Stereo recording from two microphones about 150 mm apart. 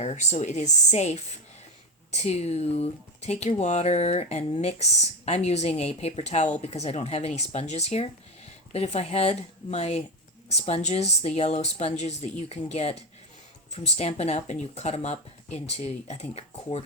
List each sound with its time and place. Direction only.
0.0 s speech: 45° left (ahead or behind)